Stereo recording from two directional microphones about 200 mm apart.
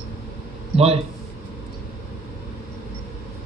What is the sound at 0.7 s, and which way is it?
Speech, 30° right (ahead or behind).